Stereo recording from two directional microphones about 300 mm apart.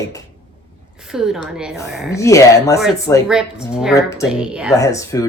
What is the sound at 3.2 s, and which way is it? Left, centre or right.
Speech, centre.